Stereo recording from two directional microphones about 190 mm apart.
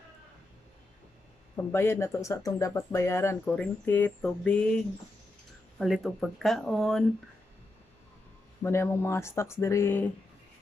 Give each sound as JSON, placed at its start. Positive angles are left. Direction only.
{"t": 1.6, "sound": "speech", "side_deg": 10}
{"t": 5.8, "sound": "speech", "side_deg": 0}
{"t": 8.6, "sound": "speech", "side_deg": 15}